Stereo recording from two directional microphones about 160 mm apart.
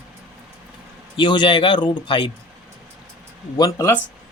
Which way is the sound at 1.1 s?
30° left (ahead or behind).